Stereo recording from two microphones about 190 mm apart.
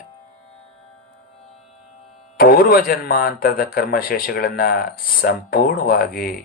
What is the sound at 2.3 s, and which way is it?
Speech, 50° left (ahead or behind).